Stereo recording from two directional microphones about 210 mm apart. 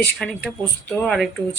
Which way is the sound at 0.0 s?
5° left (ahead or behind).